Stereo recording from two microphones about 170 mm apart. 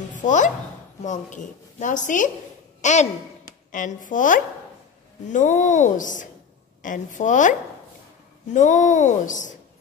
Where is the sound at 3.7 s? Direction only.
50° left (ahead or behind).